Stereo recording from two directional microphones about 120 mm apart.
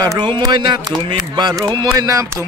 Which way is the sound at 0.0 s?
35° right (ahead or behind).